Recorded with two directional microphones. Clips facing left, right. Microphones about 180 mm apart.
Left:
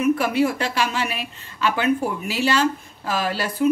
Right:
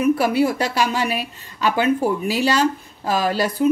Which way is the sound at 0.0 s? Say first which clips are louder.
Right 2 dB; 35° right (ahead or behind).